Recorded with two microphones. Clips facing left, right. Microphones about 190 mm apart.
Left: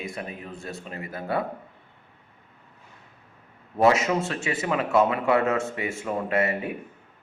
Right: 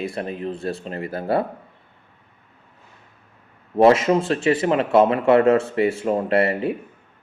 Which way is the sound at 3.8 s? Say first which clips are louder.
Right 6 dB; 30° right (ahead or behind).